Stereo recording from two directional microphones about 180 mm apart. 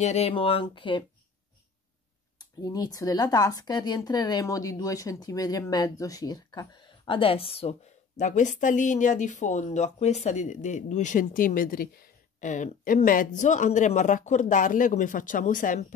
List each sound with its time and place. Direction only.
0.0 s speech: 35° left (ahead or behind)
2.3 s speech: 20° left (ahead or behind)
8.2 s speech: 40° left (ahead or behind)